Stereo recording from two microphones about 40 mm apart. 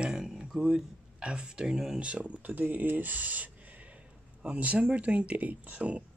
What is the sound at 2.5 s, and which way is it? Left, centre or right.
Speech, right.